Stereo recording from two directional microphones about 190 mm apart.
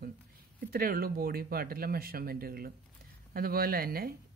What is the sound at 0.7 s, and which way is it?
Speech, 50° right (ahead or behind).